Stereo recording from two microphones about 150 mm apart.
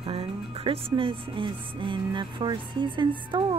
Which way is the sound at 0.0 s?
40° right (ahead or behind).